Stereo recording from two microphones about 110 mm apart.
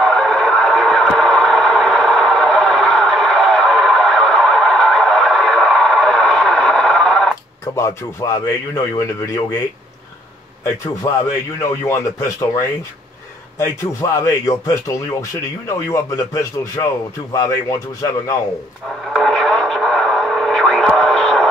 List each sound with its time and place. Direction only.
0.0 s radio: 5° left (ahead or behind)
7.6 s speech: 25° left (ahead or behind)
11.1 s speech: 30° left (ahead or behind)
15.7 s a man's voice: 30° left (ahead or behind)
18.9 s radio: 5° left (ahead or behind)